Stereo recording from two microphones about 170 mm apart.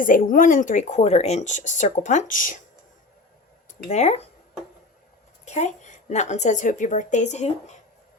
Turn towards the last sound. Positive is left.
turn(degrees=40)  # may be behind; listen again after turning